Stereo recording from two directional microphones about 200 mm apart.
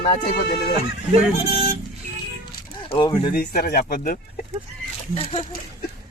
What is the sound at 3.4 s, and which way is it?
Speech, 45° left (ahead or behind).